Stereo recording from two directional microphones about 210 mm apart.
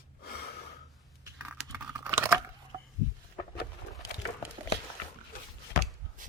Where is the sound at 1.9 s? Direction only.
15° right (ahead or behind).